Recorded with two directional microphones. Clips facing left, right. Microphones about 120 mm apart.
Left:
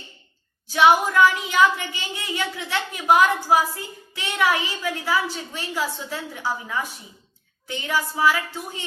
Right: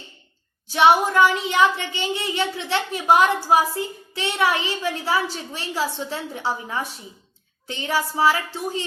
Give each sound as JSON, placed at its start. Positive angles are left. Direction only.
{"t": 0.7, "sound": "speech", "side_deg": -25}